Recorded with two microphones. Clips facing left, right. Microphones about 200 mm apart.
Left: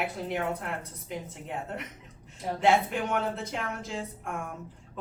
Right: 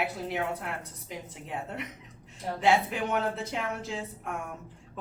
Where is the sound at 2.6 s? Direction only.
Centre (ahead or behind).